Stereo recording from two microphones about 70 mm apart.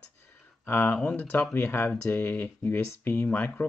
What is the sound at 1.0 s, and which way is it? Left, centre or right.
Speech, centre.